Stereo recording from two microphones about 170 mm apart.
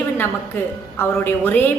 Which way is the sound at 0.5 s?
15° left (ahead or behind).